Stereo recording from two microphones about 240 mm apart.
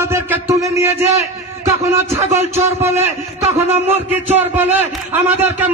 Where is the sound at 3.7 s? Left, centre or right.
Right.